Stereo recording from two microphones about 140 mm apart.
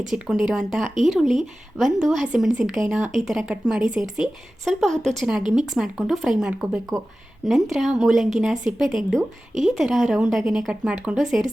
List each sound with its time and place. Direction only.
0.0 s a woman's voice: 5° right (ahead or behind)
2.8 s speech: 15° right (ahead or behind)
3.2 s a woman's voice: 5° right (ahead or behind)